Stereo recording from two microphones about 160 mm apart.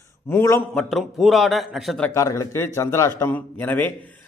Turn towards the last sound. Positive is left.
turn(degrees=10)  # may be behind; listen again after turning